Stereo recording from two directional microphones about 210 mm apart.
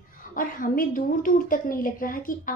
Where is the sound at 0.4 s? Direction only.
40° left (ahead or behind).